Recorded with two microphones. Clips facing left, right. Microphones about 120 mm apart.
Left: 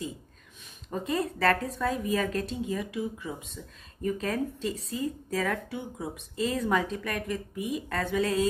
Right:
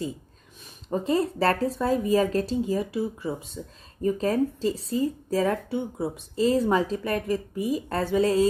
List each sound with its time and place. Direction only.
0.8 s a woman's voice: 30° right (ahead or behind)